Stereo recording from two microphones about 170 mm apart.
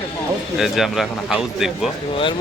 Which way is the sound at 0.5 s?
Centre (ahead or behind).